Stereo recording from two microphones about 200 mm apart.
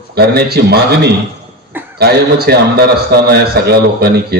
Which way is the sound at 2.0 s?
50° right (ahead or behind).